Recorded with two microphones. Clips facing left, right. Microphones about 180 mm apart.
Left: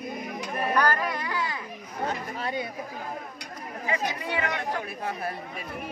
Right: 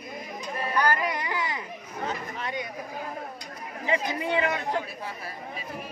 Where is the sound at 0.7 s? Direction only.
15° right (ahead or behind).